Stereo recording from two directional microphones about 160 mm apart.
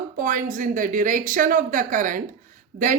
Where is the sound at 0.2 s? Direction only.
60° right (ahead or behind).